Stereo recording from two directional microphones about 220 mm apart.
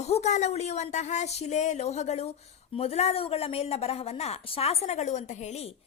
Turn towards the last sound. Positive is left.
turn(degrees=30)  # may be behind; listen again after turning